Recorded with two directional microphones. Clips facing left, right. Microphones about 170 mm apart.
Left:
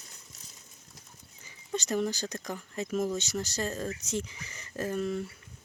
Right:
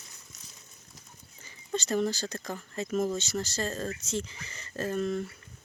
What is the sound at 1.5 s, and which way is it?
Speech, 15° left (ahead or behind).